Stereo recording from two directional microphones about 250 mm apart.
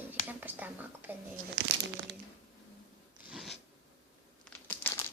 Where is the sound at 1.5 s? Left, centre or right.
Right.